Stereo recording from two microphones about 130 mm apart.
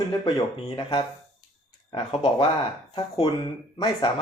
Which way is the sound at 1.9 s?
35° left (ahead or behind).